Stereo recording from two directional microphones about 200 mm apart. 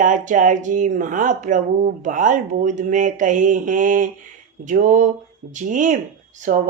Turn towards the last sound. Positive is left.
turn(degrees=-40)  # may be behind; listen again after turning